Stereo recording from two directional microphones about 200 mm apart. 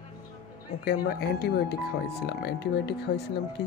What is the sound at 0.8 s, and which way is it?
Speech, 55° left (ahead or behind).